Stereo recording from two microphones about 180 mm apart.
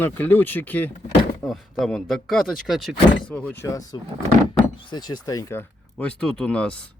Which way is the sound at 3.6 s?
20° left (ahead or behind).